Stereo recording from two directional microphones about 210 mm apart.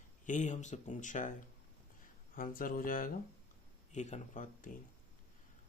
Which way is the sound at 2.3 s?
40° left (ahead or behind).